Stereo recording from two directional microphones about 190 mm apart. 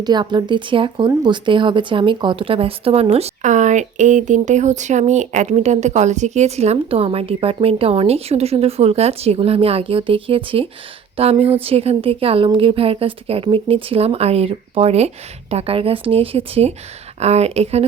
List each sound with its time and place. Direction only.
0.0 s speech: 20° right (ahead or behind)